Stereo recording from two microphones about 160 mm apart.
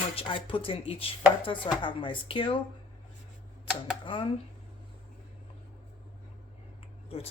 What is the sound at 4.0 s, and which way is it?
Speech, 30° left (ahead or behind).